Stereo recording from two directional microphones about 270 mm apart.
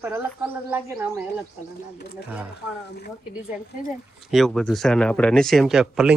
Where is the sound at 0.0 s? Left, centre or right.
Centre.